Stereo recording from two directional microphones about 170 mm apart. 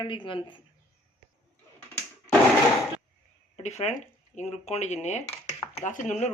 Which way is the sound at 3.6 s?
40° left (ahead or behind).